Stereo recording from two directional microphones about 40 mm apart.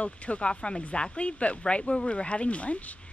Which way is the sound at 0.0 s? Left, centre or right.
Left.